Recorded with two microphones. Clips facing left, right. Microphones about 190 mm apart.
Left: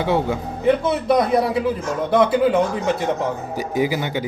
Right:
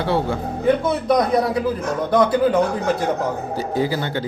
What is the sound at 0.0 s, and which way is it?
Speech, 15° left (ahead or behind).